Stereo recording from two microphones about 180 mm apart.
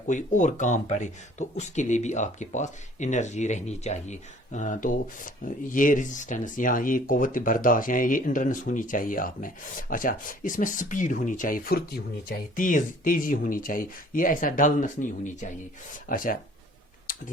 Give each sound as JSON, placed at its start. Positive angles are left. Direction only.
{"t": 0.1, "sound": "speech", "side_deg": 45}
{"t": 17.1, "sound": "tick-tock", "side_deg": 50}